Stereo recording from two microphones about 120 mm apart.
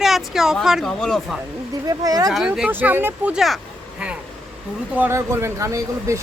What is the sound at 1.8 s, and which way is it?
Speech, 30° right (ahead or behind).